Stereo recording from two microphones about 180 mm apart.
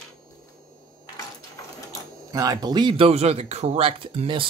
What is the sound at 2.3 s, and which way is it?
Speech, 20° right (ahead or behind).